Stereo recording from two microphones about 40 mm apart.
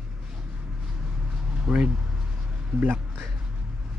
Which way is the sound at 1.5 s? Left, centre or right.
Right.